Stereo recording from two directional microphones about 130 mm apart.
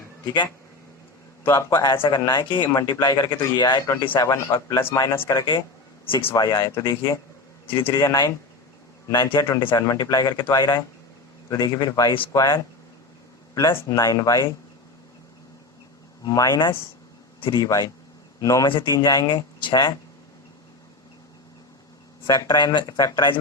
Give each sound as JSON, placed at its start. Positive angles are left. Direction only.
{"t": 1.7, "sound": "speech", "side_deg": 35}
{"t": 6.3, "sound": "speech", "side_deg": 30}
{"t": 7.7, "sound": "a man's voice", "side_deg": 45}
{"t": 7.9, "sound": "a man's voice", "side_deg": 25}
{"t": 9.4, "sound": "speech", "side_deg": 30}
{"t": 16.2, "sound": "speech", "side_deg": 25}
{"t": 22.3, "sound": "speech", "side_deg": 35}